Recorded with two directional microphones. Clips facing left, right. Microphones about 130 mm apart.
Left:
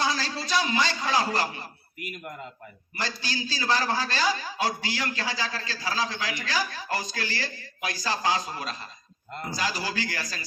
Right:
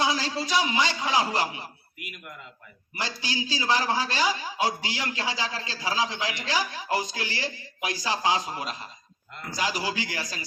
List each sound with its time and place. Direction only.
0.0 s a man's voice: 20° right (ahead or behind)
2.0 s a man's voice: 40° left (ahead or behind)
3.0 s a man's voice: 15° right (ahead or behind)